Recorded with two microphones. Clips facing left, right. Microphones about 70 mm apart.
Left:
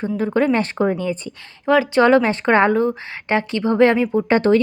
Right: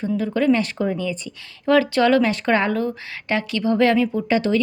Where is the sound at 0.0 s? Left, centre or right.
Left.